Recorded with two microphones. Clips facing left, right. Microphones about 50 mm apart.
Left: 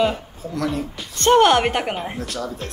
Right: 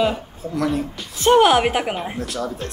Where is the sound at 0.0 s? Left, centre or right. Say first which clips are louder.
Even; centre.